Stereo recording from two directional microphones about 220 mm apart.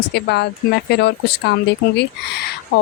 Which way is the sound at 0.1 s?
50° left (ahead or behind).